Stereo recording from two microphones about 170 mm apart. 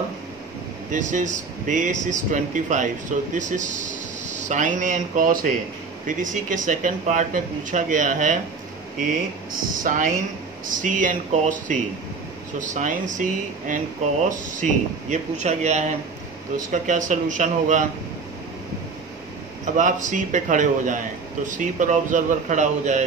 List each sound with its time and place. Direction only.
0.9 s speech: 50° right (ahead or behind)
19.6 s speech: 45° right (ahead or behind)